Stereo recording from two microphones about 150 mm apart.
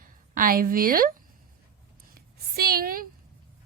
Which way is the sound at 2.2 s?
90° right.